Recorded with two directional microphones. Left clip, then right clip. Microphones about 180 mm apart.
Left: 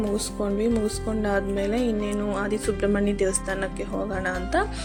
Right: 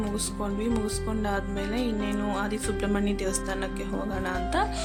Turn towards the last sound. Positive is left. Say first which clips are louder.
# left 3 dB
turn(degrees=10)  # may be behind; listen again after turning